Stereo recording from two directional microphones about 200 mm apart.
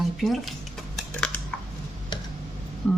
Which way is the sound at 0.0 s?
Centre (ahead or behind).